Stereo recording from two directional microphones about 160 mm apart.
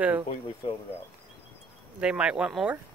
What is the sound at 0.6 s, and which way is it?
Speech, 30° left (ahead or behind).